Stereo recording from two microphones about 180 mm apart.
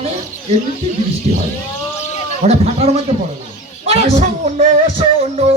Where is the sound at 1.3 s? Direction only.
40° right (ahead or behind).